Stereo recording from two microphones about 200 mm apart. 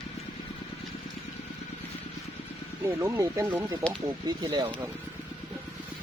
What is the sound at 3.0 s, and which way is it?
Speech, 15° right (ahead or behind).